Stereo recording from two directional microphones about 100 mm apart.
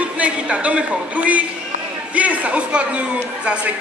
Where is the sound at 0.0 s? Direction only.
15° right (ahead or behind).